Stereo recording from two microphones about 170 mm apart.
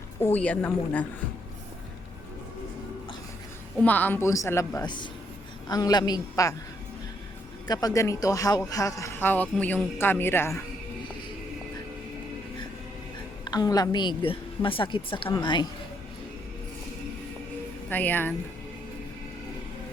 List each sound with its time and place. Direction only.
0.2 s speech: 10° left (ahead or behind)
3.8 s a woman's voice: 10° left (ahead or behind)
7.7 s speech: 20° left (ahead or behind)
13.4 s a woman's voice: 25° left (ahead or behind)
17.8 s speech: 10° left (ahead or behind)